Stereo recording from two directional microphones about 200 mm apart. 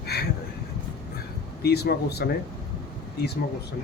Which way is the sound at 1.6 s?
55° left (ahead or behind).